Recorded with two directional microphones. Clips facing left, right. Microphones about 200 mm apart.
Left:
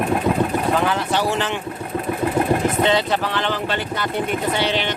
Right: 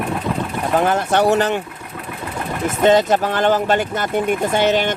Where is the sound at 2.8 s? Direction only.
45° right (ahead or behind).